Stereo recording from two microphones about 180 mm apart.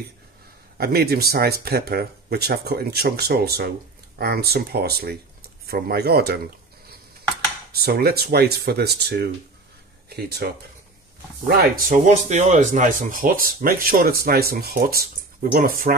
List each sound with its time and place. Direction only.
0.7 s speech: 60° right (ahead or behind)
7.7 s speech: 60° right (ahead or behind)